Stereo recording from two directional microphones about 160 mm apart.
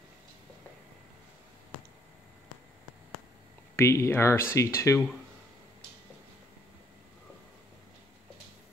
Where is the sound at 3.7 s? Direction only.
20° left (ahead or behind).